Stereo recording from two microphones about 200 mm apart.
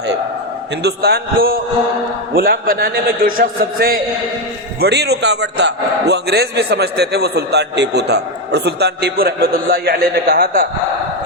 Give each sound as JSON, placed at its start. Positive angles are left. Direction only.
{"t": 0.8, "sound": "a man's voice", "side_deg": -55}